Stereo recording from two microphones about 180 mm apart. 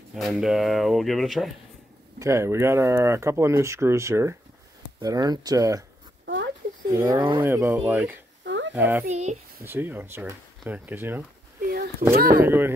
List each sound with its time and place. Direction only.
0.1 s speech: centre (ahead or behind)
2.1 s speech: 15° right (ahead or behind)
6.2 s a sound: 80° right
7.0 s speech: 20° right (ahead or behind)
7.4 s speech: 15° right (ahead or behind)
8.5 s a sound: 80° right
8.7 s speech: 10° right (ahead or behind)
9.0 s speech: 40° right (ahead or behind)
9.6 s speech: 10° right (ahead or behind)
11.6 s a sound: 55° right (ahead or behind)
12.2 s speech: 55° right (ahead or behind)
12.4 s speech: 10° right (ahead or behind)